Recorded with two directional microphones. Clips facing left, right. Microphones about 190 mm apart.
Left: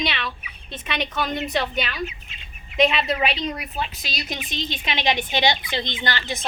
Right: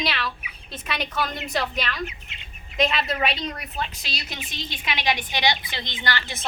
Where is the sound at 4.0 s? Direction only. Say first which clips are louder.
Left 4 dB; 15° left (ahead or behind).